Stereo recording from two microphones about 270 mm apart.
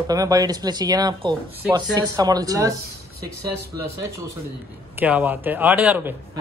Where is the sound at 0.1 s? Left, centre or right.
Centre.